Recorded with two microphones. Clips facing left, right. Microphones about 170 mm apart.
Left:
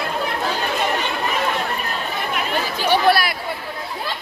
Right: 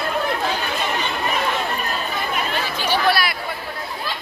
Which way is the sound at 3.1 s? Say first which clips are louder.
Left 2 dB; 50° left (ahead or behind).